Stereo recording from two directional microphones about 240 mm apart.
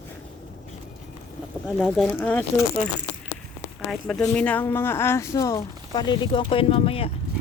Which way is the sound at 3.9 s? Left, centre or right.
Centre.